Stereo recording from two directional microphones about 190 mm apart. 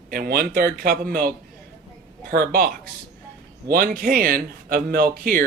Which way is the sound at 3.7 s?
50° right (ahead or behind).